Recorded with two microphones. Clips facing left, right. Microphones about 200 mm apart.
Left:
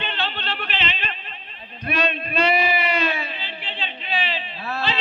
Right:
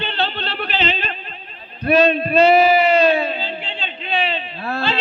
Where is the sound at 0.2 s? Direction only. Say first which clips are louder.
Right 5 dB; 35° right (ahead or behind).